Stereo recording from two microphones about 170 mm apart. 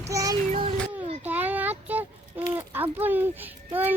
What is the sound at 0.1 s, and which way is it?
Child singing, 20° right (ahead or behind).